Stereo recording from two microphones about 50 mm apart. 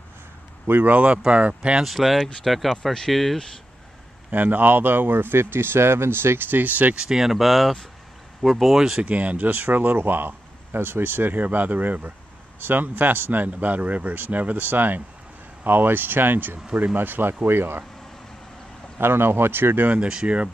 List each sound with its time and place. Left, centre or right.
0.7 s speech: right
1.8 s speech: centre
4.3 s speech: right
7.0 s speech: centre
9.0 s speech: right
9.5 s speech: right
18.9 s speech: right
20.2 s speech: right